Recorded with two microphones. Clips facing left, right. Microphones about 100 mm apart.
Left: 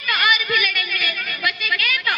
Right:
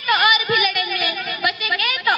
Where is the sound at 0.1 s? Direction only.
20° right (ahead or behind).